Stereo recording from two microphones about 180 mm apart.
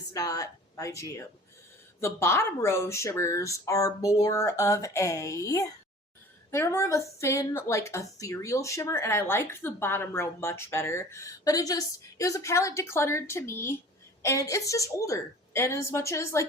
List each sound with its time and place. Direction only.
0.1 s speech: 20° left (ahead or behind)